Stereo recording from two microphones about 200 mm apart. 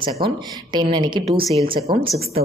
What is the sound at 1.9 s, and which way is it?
Speech, 35° right (ahead or behind).